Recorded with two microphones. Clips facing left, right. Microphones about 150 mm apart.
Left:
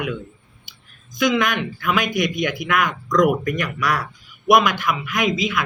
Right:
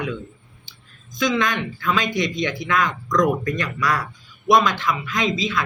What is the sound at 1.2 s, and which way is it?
Speech, 10° left (ahead or behind).